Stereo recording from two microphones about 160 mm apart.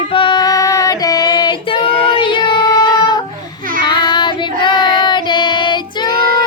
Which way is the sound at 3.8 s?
25° left (ahead or behind).